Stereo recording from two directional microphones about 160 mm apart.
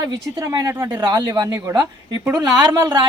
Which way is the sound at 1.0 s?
25° right (ahead or behind).